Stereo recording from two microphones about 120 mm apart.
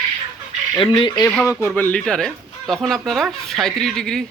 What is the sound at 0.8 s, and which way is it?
Speech, 45° left (ahead or behind).